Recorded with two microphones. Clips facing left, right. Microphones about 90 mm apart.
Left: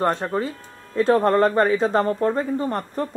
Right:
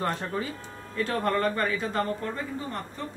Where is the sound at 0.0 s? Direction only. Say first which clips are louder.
Left 8 dB; 25° left (ahead or behind).